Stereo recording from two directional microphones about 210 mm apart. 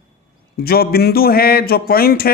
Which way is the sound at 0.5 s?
45° left (ahead or behind).